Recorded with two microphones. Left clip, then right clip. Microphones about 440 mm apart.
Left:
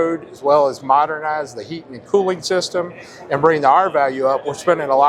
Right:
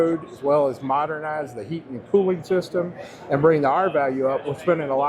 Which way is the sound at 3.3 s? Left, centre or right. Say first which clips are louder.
Left 5 dB; left.